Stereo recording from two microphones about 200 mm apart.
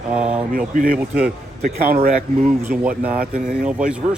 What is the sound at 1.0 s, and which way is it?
Speech, 5° right (ahead or behind).